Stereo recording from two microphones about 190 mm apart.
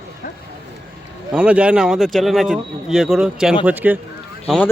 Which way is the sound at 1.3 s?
5° right (ahead or behind).